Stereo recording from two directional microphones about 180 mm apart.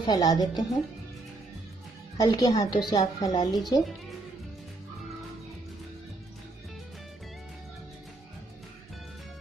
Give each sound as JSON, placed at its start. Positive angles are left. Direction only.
{"t": 0.0, "sound": "a woman's voice", "side_deg": 20}
{"t": 2.1, "sound": "a woman's voice", "side_deg": 20}